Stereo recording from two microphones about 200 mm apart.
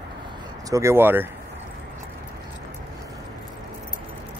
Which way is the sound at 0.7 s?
15° right (ahead or behind).